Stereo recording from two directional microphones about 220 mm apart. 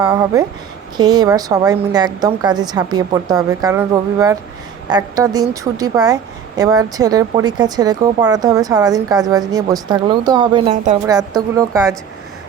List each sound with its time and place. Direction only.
0.1 s speech: 15° right (ahead or behind)